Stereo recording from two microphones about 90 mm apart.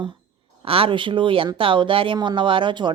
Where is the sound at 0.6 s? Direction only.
90° right; by 2.1 s 70° right (ahead or behind).